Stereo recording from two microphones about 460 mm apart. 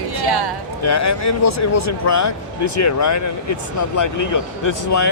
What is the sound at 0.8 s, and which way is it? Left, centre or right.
Speech, left.